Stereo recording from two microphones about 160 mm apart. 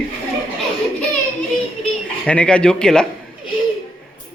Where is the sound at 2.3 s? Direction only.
5° left (ahead or behind).